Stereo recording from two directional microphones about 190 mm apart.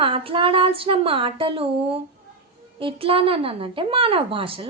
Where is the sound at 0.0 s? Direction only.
30° right (ahead or behind).